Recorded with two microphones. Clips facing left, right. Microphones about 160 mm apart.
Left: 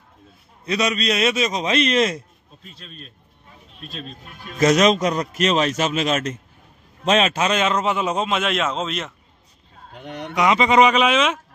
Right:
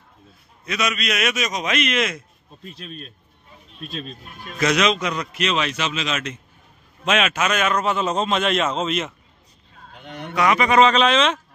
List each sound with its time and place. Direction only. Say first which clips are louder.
0.7 s a man's voice: left 4 dB; 30° left (ahead or behind)
4.6 s a man's voice: left 4 dB; 40° left (ahead or behind)
7.1 s a man's voice: left 2 dB; 35° left (ahead or behind); by 9.1 s centre (ahead or behind)
10.3 s a man's voice: left 1 dB; 20° left (ahead or behind)